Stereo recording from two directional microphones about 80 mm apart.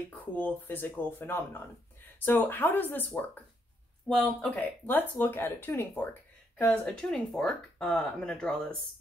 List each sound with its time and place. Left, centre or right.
0.2 s speech: left
4.1 s speech: centre
4.8 s speech: left; by 8.5 s centre